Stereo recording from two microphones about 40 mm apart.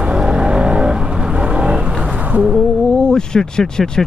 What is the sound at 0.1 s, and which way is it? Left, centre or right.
Vehicle, right.